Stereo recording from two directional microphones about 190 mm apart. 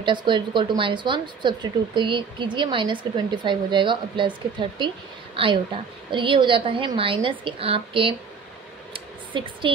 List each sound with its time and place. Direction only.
0.0 s speech: 25° right (ahead or behind)
9.3 s speech: 25° right (ahead or behind)